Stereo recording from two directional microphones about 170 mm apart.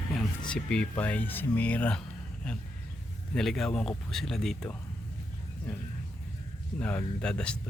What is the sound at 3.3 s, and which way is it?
Speech, centre (ahead or behind).